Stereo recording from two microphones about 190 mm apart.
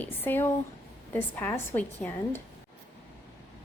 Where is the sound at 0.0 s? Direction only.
10° left (ahead or behind).